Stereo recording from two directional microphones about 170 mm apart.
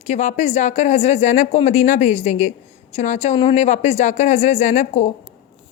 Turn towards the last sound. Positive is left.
turn(degrees=45)  # may be behind; listen again after turning